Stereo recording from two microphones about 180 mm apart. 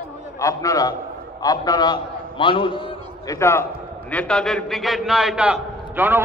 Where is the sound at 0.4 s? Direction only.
20° left (ahead or behind).